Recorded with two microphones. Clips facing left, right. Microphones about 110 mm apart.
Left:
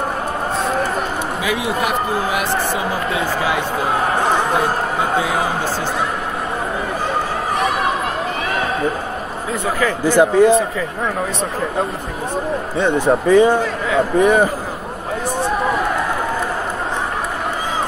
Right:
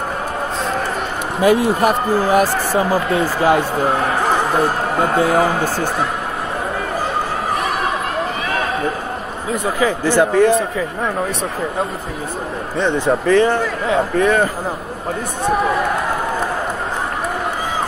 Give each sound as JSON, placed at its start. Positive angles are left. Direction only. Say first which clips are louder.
{"t": 1.4, "sound": "speech", "louder": "right 9 dB", "side_deg": -45}
{"t": 5.0, "sound": "speech", "louder": "right 6 dB", "side_deg": -50}
{"t": 10.0, "sound": "speech", "louder": "left 2 dB", "side_deg": 15}
{"t": 12.7, "sound": "speech", "louder": "left 1 dB", "side_deg": 10}